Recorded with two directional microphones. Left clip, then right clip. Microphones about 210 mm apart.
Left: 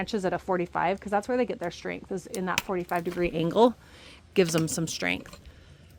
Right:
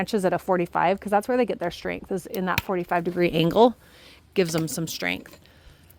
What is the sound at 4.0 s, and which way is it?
Speech, 15° right (ahead or behind).